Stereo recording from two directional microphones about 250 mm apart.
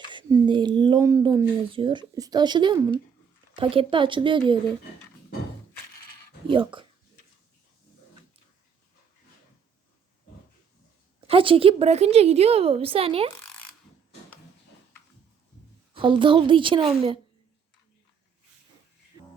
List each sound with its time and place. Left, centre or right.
0.1 s a sound: centre
3.5 s a woman's voice: right
6.5 s a woman's voice: centre
11.3 s a woman's voice: right
16.0 s a woman's voice: centre